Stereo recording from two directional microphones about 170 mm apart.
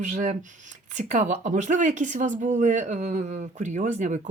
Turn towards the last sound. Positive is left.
turn(degrees=-45)  # may be behind; listen again after turning